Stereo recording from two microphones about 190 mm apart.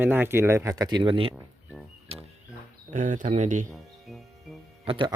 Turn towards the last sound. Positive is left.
turn(degrees=-30)  # may be behind; listen again after turning